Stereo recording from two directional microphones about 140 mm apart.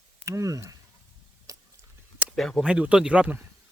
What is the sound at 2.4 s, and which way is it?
Speech, centre (ahead or behind).